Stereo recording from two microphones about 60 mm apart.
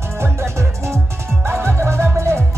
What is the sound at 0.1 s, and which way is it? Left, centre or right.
Music, right.